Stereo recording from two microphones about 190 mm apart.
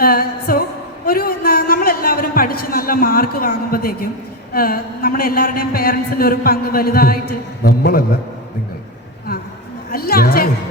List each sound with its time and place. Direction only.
0.0 s music: 50° left (ahead or behind)
1.0 s a sound: 50° left (ahead or behind)
4.5 s a man's voice: 50° left (ahead or behind)
9.9 s a woman's voice: 50° left (ahead or behind)